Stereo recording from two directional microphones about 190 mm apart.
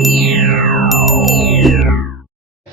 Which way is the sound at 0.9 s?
Centre (ahead or behind).